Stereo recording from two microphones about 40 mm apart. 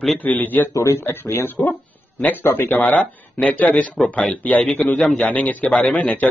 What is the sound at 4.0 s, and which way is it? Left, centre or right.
Speech, centre.